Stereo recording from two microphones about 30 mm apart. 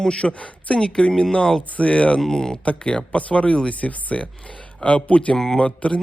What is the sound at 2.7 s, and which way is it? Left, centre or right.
Speech, left.